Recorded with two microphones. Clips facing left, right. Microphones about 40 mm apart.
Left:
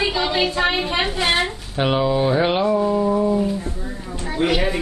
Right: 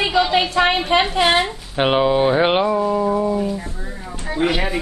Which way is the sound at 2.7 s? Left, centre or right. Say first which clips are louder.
Even; centre.